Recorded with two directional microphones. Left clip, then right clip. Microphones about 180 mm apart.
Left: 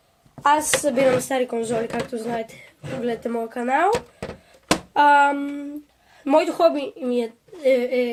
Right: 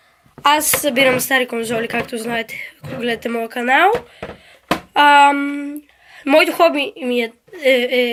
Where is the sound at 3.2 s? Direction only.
5° right (ahead or behind).